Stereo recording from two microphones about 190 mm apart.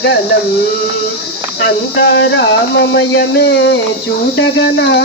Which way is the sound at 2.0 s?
65° left (ahead or behind).